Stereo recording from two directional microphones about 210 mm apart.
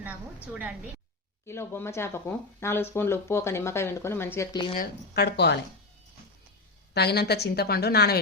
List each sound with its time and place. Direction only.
1.5 s speech: 10° left (ahead or behind)
4.8 s a woman's voice: 50° left (ahead or behind)
6.9 s a woman's voice: 50° left (ahead or behind)